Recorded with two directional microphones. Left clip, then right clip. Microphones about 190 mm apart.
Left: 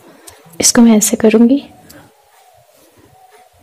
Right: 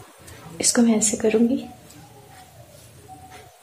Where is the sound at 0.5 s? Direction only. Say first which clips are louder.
Left 10 dB; 50° left (ahead or behind).